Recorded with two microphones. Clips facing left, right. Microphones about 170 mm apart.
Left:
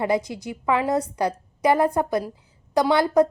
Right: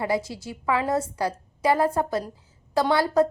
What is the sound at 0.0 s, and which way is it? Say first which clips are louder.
A woman's voice: left 3 dB; 20° left (ahead or behind).